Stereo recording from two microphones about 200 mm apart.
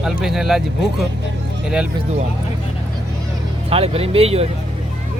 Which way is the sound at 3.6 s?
30° right (ahead or behind).